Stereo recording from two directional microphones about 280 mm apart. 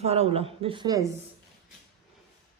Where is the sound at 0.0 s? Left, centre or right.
Right.